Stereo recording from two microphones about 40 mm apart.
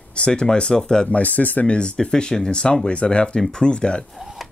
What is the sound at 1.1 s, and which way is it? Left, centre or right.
Speech, left.